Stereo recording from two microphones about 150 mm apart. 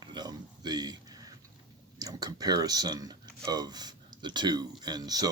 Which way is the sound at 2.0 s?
25° right (ahead or behind).